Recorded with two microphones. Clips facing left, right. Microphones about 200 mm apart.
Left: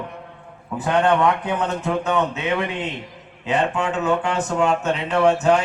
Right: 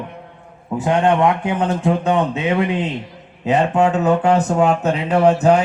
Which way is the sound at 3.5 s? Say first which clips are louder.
Right 6 dB; 40° right (ahead or behind).